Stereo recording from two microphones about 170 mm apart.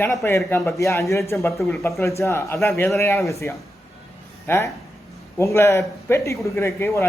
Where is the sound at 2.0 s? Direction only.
15° left (ahead or behind).